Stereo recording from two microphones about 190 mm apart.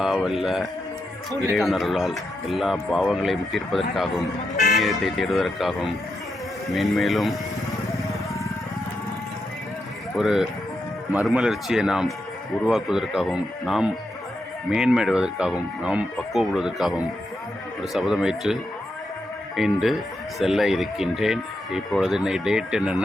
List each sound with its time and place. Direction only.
0.0 s speech: centre (ahead or behind)
10.2 s speech: centre (ahead or behind)